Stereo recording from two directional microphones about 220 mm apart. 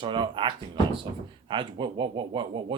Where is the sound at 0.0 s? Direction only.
20° right (ahead or behind).